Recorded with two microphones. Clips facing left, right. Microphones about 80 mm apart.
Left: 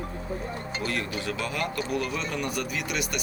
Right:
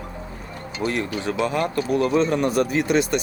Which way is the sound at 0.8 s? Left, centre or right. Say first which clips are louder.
Right 7 dB; right.